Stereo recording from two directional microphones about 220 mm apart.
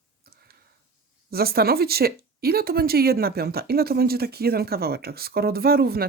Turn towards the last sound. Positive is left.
turn(degrees=-45)  # may be behind; listen again after turning